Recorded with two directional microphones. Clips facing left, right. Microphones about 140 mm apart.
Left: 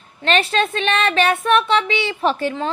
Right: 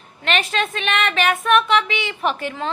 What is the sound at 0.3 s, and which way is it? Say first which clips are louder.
Speech: left 4 dB; 35° left (ahead or behind).